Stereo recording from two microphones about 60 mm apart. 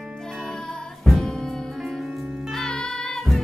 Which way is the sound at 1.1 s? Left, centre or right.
Centre.